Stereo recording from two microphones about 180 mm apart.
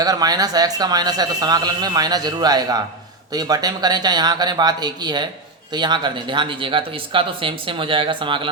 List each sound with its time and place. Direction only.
0.0 s a man's voice: 20° right (ahead or behind)